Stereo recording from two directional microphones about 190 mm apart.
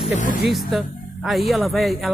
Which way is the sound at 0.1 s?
40° left (ahead or behind).